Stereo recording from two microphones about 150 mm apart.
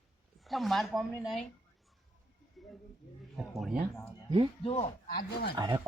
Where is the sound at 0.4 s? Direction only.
Centre (ahead or behind).